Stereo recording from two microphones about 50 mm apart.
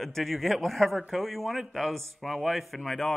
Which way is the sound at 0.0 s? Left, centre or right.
Centre.